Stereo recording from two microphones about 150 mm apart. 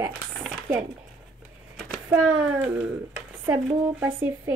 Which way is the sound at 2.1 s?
10° right (ahead or behind).